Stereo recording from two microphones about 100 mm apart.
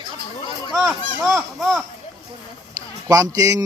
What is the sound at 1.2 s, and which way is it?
Speech, 25° right (ahead or behind).